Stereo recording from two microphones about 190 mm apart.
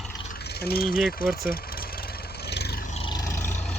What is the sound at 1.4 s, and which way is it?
Vehicle, 50° left (ahead or behind).